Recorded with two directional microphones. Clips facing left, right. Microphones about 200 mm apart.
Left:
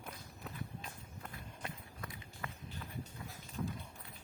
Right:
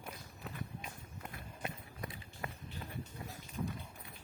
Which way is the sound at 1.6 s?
20° right (ahead or behind).